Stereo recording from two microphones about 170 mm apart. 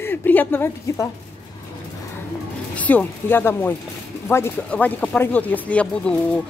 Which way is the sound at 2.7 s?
10° left (ahead or behind).